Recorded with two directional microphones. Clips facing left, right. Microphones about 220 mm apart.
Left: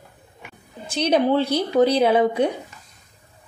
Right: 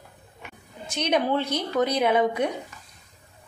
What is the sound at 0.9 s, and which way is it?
A woman's voice, 30° left (ahead or behind).